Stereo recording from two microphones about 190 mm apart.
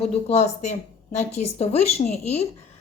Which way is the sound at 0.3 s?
35° left (ahead or behind).